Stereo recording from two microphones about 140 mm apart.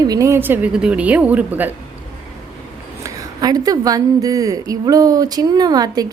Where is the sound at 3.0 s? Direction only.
30° right (ahead or behind).